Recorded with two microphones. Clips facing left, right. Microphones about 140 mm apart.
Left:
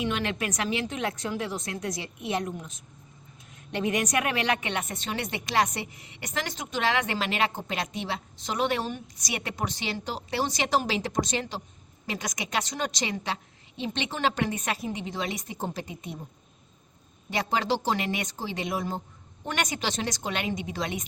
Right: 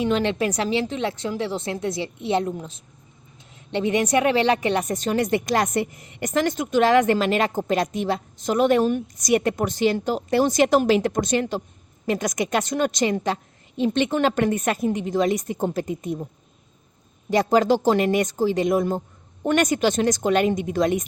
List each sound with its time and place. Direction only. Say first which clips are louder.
0.0 s speech: right 8 dB; 35° right (ahead or behind)
17.2 s speech: right 9 dB; 40° right (ahead or behind)